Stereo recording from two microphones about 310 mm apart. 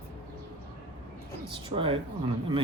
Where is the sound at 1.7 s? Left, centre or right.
Centre.